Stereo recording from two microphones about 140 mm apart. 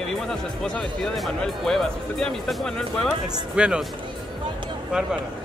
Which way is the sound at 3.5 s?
5° right (ahead or behind).